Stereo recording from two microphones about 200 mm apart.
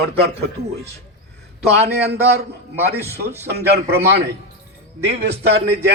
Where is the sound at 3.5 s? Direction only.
55° right (ahead or behind).